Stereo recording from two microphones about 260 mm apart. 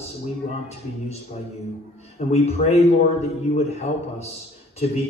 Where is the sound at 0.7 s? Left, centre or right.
Left.